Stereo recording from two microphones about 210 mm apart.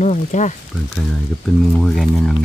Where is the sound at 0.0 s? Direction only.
35° left (ahead or behind).